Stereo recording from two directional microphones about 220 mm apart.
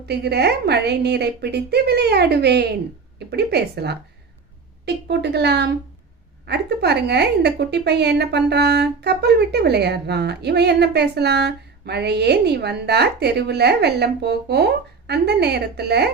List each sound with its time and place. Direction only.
0.0 s a woman's voice: 50° right (ahead or behind)
5.0 s a woman's voice: 50° right (ahead or behind)